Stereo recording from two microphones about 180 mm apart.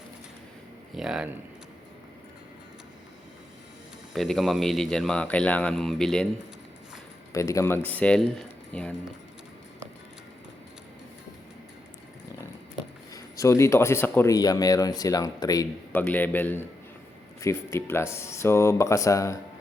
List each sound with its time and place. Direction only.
0.9 s a man's voice: 5° right (ahead or behind)
4.1 s a man's voice: centre (ahead or behind)
7.3 s speech: 15° left (ahead or behind)
13.1 s speech: 15° left (ahead or behind)